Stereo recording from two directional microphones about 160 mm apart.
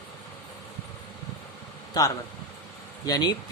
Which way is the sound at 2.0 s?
25° left (ahead or behind).